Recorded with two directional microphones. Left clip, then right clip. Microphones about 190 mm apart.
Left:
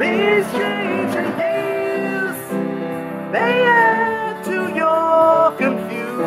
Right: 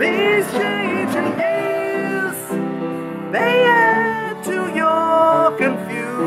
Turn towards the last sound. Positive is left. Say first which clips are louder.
# left 1 dB
turn(degrees=-10)  # may be behind; listen again after turning